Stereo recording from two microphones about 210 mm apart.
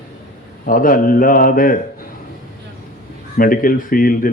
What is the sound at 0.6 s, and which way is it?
Speech, 40° left (ahead or behind).